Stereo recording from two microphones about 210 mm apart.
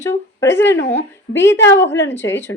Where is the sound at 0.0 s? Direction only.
10° left (ahead or behind).